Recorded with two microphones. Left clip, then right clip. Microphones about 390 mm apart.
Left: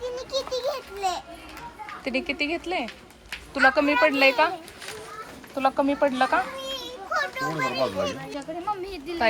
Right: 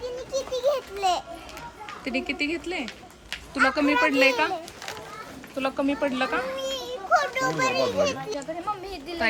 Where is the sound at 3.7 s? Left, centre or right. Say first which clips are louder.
Left 1 dB; centre.